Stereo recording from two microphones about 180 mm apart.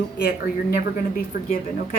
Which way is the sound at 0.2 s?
60° left (ahead or behind).